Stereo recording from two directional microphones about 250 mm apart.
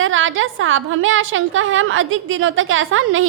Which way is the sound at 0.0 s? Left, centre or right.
Right.